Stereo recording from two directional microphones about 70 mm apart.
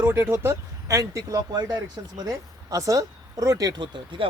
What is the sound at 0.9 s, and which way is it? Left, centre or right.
Speech, right.